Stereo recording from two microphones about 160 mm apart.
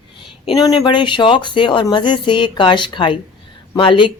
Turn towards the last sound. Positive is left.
turn(degrees=30)  # may be behind; listen again after turning